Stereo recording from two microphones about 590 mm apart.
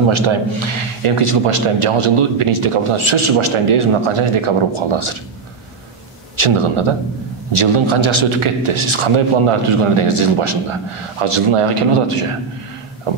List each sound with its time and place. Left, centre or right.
0.1 s a man's voice: right
6.3 s a man's voice: right